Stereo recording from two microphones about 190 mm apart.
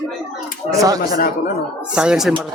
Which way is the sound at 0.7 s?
20° right (ahead or behind).